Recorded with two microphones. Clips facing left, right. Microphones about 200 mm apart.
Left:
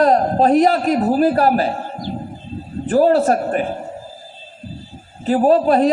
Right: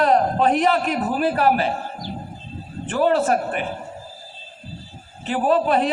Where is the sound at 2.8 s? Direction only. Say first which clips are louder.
Left 5 dB; 40° left (ahead or behind).